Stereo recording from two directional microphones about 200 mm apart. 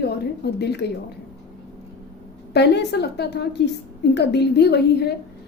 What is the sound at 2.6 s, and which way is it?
A woman's voice, 55° left (ahead or behind).